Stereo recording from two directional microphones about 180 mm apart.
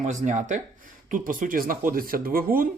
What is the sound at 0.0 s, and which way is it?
Speech, 45° right (ahead or behind).